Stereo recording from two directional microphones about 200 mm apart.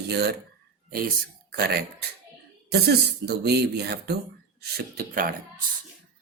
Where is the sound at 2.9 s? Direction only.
55° right (ahead or behind).